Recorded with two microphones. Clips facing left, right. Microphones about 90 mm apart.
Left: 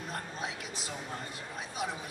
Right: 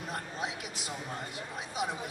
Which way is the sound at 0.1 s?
20° right (ahead or behind).